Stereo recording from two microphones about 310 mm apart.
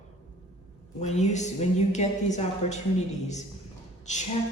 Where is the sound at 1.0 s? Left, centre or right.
Left.